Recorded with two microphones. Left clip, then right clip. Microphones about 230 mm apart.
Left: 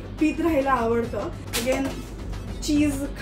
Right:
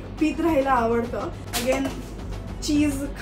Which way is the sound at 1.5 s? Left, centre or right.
Centre.